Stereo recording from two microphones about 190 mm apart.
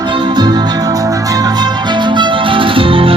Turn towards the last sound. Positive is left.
turn(degrees=-30)  # may be behind; listen again after turning